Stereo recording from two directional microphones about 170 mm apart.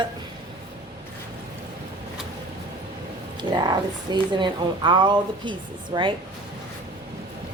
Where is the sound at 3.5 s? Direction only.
25° right (ahead or behind).